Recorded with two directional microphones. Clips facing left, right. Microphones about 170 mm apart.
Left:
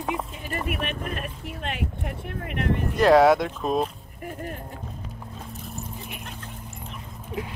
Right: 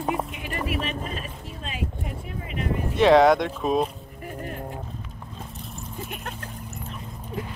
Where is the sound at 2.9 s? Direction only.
Centre (ahead or behind).